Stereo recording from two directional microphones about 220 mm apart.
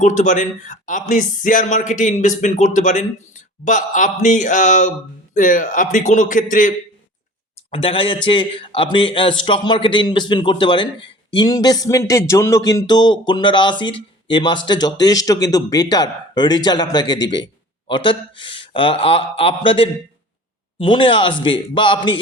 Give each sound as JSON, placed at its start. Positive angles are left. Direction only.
{"t": 0.0, "sound": "speech", "side_deg": 35}
{"t": 7.7, "sound": "speech", "side_deg": 25}